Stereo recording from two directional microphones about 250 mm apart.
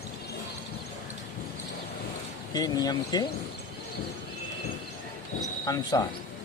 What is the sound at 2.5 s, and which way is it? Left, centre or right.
Speech, centre.